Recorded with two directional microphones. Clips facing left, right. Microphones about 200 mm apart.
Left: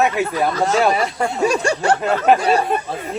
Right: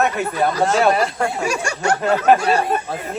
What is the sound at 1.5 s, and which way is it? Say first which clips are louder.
Speech: left 3 dB; 35° left (ahead or behind).